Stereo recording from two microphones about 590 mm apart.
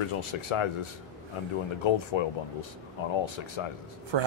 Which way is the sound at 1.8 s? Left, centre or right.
Left.